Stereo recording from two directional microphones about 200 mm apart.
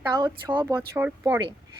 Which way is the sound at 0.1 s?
15° right (ahead or behind).